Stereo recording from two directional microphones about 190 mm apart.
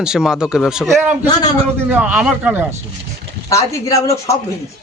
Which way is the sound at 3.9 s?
15° left (ahead or behind).